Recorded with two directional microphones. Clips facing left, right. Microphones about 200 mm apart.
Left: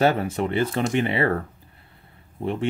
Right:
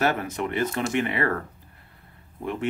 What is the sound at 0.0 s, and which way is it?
Speech, 30° left (ahead or behind).